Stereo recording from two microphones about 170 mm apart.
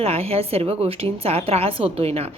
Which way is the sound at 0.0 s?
35° right (ahead or behind).